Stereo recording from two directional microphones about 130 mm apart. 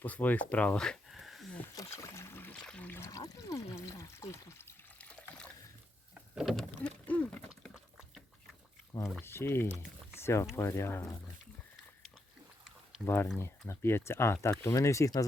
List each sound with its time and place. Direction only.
0.0 s speech: 10° left (ahead or behind)
1.7 s a sound: 25° left (ahead or behind)
4.9 s water: 10° left (ahead or behind)
6.3 s vehicle: centre (ahead or behind)
7.7 s a sound: 5° right (ahead or behind)
9.2 s speech: 20° left (ahead or behind)
10.2 s a sound: 20° left (ahead or behind)
10.5 s speech: 20° left (ahead or behind)
13.1 s speech: 15° left (ahead or behind)